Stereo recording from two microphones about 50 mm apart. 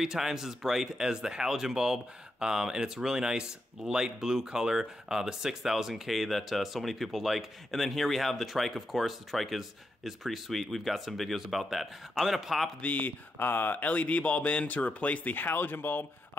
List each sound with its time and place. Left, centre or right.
0.0 s speech: centre
12.8 s speech: left